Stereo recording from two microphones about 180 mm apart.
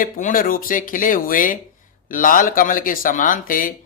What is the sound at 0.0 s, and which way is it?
Speech, 45° left (ahead or behind).